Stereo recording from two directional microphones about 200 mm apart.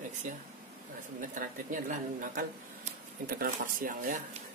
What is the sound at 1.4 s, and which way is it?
A woman's voice, 40° right (ahead or behind).